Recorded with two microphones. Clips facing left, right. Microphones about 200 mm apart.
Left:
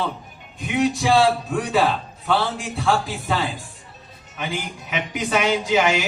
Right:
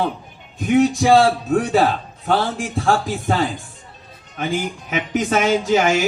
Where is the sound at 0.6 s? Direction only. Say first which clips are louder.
Right 6 dB; 45° right (ahead or behind).